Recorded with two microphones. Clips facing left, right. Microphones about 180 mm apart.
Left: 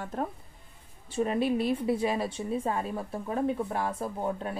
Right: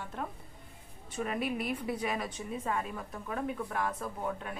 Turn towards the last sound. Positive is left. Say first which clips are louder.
# left 5 dB
turn(degrees=30)  # may be behind; listen again after turning